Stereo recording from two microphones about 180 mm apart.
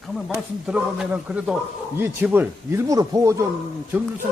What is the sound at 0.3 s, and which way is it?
A man's voice, 5° right (ahead or behind).